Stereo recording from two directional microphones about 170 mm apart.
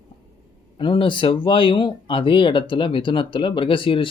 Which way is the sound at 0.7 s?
30° left (ahead or behind).